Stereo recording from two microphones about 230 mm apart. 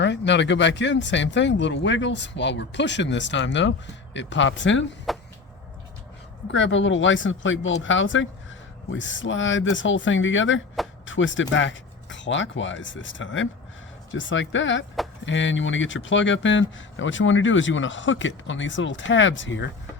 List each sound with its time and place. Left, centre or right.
0.0 s speech: left
5.1 s a sound: centre
6.5 s speech: left